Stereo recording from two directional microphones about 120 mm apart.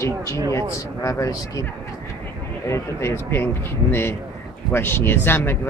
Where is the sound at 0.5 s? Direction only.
25° left (ahead or behind).